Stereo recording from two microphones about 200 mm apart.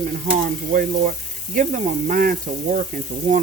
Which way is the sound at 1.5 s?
40° right (ahead or behind).